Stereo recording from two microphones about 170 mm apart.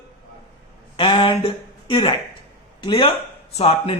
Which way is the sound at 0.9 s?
30° left (ahead or behind).